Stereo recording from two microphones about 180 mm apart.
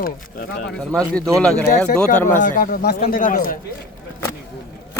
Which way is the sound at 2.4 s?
45° left (ahead or behind).